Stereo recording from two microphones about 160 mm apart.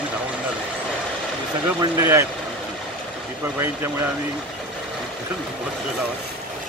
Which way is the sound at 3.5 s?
15° right (ahead or behind).